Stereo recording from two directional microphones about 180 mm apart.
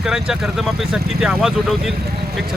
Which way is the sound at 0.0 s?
5° right (ahead or behind).